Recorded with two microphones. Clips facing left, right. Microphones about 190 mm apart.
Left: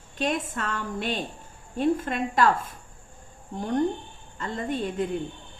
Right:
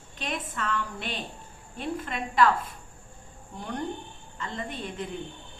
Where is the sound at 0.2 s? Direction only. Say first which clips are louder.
Left 6 dB; 50° left (ahead or behind).